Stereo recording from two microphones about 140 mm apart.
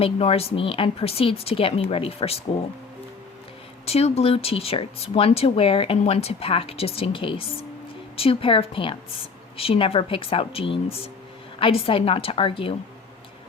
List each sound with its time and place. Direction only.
0.0 s speech: 45° left (ahead or behind)
3.8 s speech: 45° left (ahead or behind)